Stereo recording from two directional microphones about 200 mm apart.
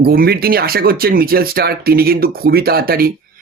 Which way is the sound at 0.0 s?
50° right (ahead or behind).